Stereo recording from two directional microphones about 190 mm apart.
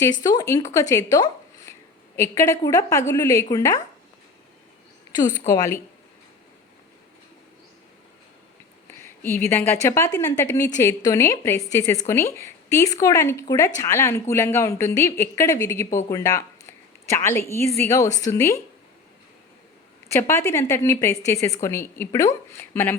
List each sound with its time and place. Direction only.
0.0 s a woman's voice: 20° left (ahead or behind)
5.5 s a woman's voice: 15° left (ahead or behind)
9.0 s a woman's voice: 10° left (ahead or behind)
20.1 s a woman's voice: 15° left (ahead or behind)